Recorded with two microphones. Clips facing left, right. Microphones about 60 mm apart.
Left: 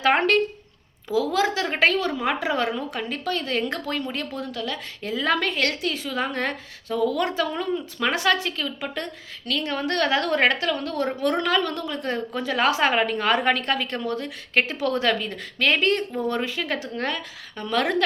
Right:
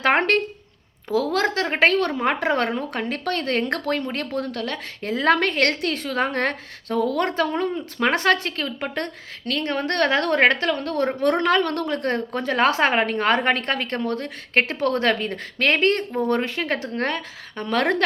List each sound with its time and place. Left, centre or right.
0.0 s a woman's voice: right